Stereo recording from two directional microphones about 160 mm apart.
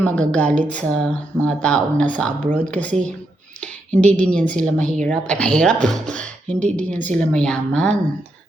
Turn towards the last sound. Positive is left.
turn(degrees=5)  # may be behind; listen again after turning